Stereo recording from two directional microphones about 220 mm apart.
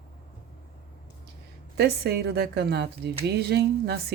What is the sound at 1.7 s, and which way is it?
Speech, 50° right (ahead or behind).